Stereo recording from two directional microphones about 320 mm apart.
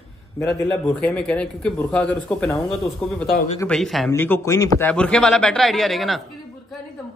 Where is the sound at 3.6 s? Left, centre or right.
Centre.